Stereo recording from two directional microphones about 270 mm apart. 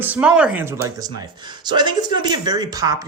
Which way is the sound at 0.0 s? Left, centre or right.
Centre.